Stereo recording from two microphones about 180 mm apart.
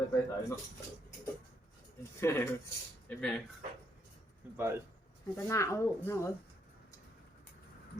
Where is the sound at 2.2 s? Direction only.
15° left (ahead or behind).